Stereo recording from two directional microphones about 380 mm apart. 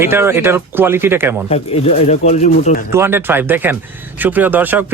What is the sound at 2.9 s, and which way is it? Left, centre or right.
Speech, centre.